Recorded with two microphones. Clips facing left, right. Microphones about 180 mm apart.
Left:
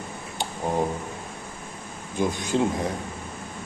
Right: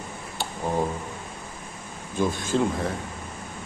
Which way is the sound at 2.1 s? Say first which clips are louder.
Even; 20° left (ahead or behind).